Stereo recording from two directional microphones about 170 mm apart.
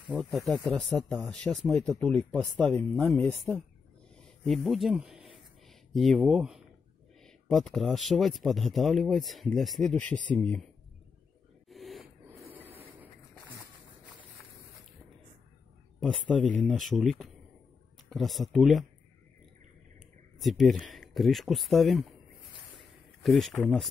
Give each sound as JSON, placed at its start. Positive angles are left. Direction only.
{"t": 0.2, "sound": "speech", "side_deg": 0}
{"t": 11.7, "sound": "snort", "side_deg": 0}
{"t": 16.0, "sound": "speech", "side_deg": 5}
{"t": 20.3, "sound": "speech", "side_deg": 0}
{"t": 22.8, "sound": "a sound", "side_deg": 0}
{"t": 23.5, "sound": "speech", "side_deg": 5}